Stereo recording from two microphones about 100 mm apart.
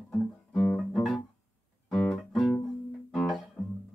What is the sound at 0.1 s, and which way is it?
Guitar, 10° left (ahead or behind).